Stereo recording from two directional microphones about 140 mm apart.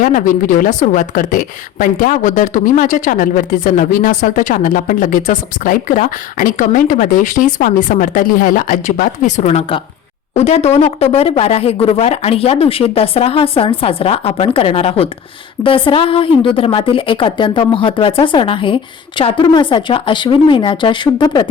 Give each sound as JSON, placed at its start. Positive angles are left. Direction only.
{"t": 0.0, "sound": "a woman's voice", "side_deg": 70}